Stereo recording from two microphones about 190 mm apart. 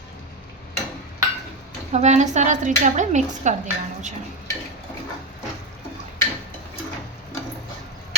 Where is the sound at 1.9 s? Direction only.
35° right (ahead or behind).